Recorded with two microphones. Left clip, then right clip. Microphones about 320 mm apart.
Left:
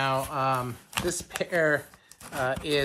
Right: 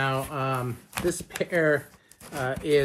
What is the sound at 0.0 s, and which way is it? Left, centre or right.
Speech, centre.